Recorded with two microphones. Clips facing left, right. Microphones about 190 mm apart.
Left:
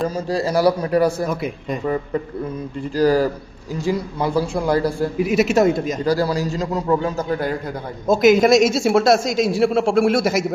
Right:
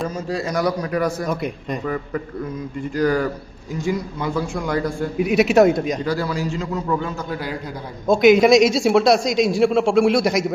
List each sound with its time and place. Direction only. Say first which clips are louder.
0.3 s a man's voice: left 5 dB; 35° left (ahead or behind)
1.3 s a man's voice: even; centre (ahead or behind)
2.9 s a man's voice: left 3 dB; 30° left (ahead or behind)
5.1 s a man's voice: right 3 dB; centre (ahead or behind)
6.1 s a man's voice: left 4 dB; 35° left (ahead or behind)
8.0 s a man's voice: right 1 dB; centre (ahead or behind)